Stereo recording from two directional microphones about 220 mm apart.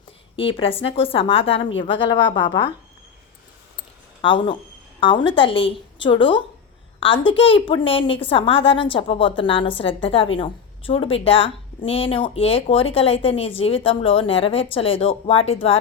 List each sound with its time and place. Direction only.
0.3 s a woman's voice: 25° left (ahead or behind)
4.2 s a woman's voice: 20° left (ahead or behind)